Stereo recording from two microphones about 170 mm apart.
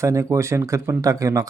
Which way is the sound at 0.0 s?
20° right (ahead or behind).